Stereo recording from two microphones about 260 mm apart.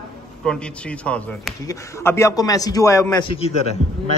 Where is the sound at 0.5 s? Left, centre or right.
Centre.